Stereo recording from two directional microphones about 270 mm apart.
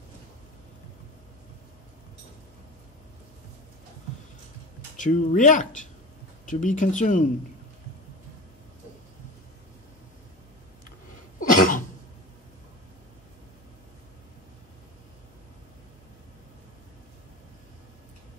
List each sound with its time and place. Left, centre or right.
4.9 s speech: left
11.3 s cough: left